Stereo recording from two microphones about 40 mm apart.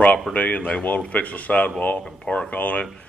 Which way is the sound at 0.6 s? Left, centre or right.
Left.